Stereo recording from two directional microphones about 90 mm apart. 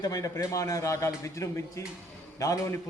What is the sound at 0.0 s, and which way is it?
A man's voice, 40° left (ahead or behind).